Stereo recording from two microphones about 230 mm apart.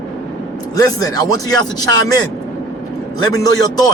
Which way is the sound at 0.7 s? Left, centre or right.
Centre.